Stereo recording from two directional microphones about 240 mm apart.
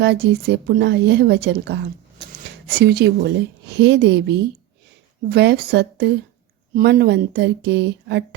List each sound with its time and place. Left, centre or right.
0.0 s speech: right